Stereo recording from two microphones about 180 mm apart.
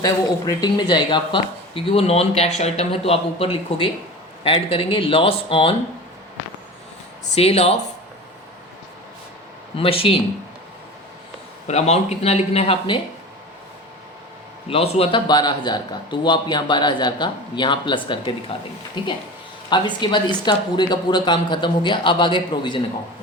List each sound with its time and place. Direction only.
0.0 s speech: 20° left (ahead or behind)
7.3 s speech: 35° left (ahead or behind)
9.7 s speech: 30° left (ahead or behind)
11.7 s speech: 35° left (ahead or behind)
14.7 s a man's voice: 35° left (ahead or behind)
19.7 s a man's voice: 25° left (ahead or behind)